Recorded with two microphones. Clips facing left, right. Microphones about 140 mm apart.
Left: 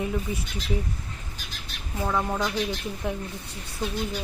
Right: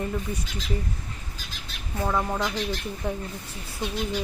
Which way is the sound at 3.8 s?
20° right (ahead or behind).